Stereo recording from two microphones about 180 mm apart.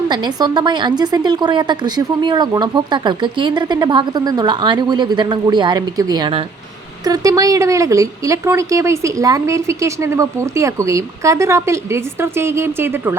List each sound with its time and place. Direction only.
0.1 s a woman's voice: 25° right (ahead or behind)